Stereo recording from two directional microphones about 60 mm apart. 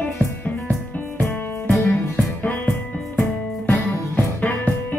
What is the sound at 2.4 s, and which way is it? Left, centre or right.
Music, left.